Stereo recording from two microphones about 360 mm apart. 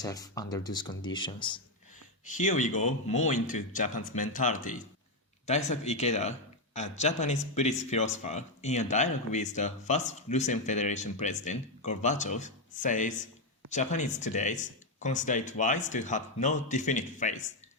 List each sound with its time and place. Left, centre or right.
0.0 s speech: centre